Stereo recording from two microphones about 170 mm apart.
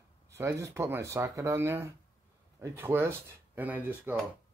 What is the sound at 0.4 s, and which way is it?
Speech, 20° right (ahead or behind).